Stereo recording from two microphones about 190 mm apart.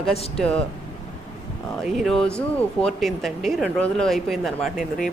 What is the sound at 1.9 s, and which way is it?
Speech, centre (ahead or behind).